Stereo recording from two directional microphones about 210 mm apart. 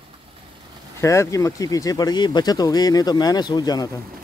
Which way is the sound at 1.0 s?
15° left (ahead or behind).